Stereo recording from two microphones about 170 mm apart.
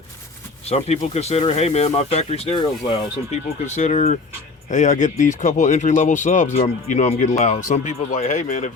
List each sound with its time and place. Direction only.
0.6 s speech: 40° left (ahead or behind)
3.7 s speech: 45° left (ahead or behind)